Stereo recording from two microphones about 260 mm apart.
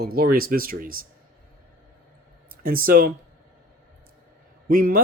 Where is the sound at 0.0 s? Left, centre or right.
Right.